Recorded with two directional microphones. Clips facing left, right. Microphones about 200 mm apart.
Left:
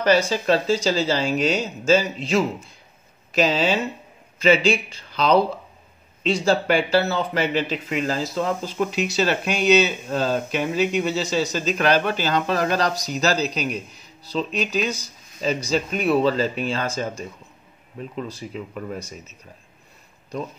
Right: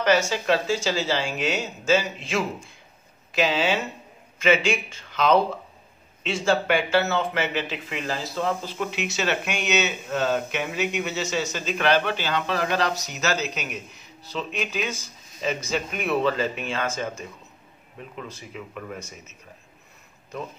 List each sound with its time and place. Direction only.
0.0 s speech: 35° left (ahead or behind)